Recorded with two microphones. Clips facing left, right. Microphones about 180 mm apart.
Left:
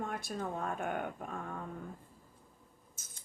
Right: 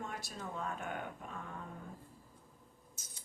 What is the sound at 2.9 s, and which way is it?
Mouse, 50° left (ahead or behind).